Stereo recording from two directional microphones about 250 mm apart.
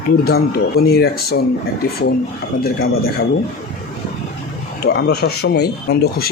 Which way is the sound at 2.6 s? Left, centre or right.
Left.